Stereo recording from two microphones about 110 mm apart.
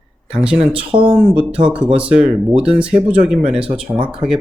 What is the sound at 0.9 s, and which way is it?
Speech, 55° right (ahead or behind).